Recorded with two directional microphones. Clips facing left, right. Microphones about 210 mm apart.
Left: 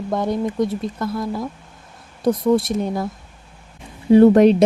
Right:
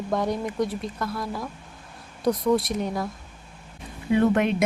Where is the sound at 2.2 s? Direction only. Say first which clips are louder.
Left 5 dB; 50° left (ahead or behind).